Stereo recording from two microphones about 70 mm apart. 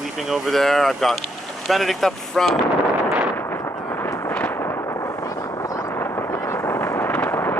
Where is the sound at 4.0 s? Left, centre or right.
Left.